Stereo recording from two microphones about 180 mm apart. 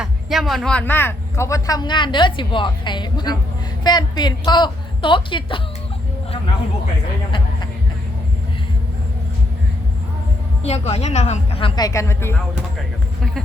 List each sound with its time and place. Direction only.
0.0 s speech: centre (ahead or behind); by 5.6 s 30° left (ahead or behind)
10.6 s a woman's voice: 35° left (ahead or behind)
11.9 s speech: 15° left (ahead or behind)